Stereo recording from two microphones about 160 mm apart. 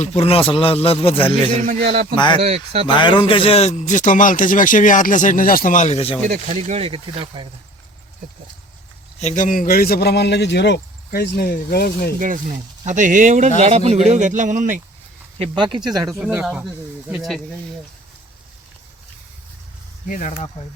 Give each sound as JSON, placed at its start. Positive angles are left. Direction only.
{"t": 0.0, "sound": "a man's voice", "side_deg": 40}
{"t": 2.4, "sound": "speech", "side_deg": -40}
{"t": 2.8, "sound": "a man's voice", "side_deg": 30}
{"t": 6.6, "sound": "speech", "side_deg": -40}
{"t": 9.2, "sound": "a man's voice", "side_deg": 50}
{"t": 12.2, "sound": "speech", "side_deg": -50}
{"t": 15.4, "sound": "speech", "side_deg": -30}
{"t": 16.2, "sound": "speech", "side_deg": -5}
{"t": 20.1, "sound": "a man's voice", "side_deg": 55}